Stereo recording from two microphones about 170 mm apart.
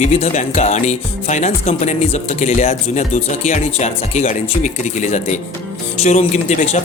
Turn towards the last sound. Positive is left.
turn(degrees=45)  # may be behind; listen again after turning